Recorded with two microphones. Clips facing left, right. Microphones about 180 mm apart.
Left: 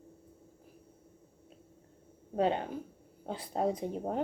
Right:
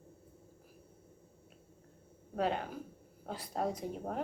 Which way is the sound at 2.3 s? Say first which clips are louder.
Left 4 dB; 30° left (ahead or behind).